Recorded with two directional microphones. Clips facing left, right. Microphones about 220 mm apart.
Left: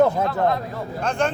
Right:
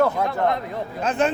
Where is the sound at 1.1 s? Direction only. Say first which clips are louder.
Right 2 dB; 5° right (ahead or behind).